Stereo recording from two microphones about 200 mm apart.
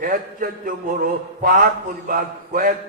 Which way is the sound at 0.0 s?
45° right (ahead or behind).